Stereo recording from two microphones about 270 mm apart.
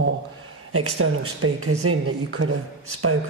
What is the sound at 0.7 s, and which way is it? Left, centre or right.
Speech, right.